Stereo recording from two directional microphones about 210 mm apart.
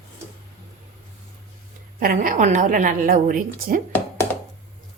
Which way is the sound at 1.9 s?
40° right (ahead or behind).